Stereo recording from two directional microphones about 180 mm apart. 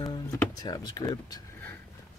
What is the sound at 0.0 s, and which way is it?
Speech, 20° left (ahead or behind).